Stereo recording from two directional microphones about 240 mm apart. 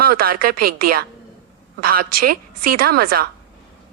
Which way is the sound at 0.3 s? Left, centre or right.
Right.